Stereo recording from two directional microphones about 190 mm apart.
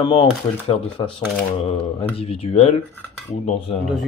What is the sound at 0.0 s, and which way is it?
Speech, 25° left (ahead or behind).